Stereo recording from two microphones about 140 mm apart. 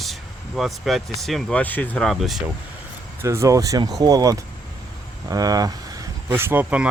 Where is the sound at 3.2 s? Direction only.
20° right (ahead or behind).